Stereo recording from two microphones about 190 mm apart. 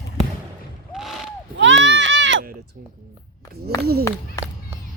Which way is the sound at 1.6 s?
75° right (ahead or behind).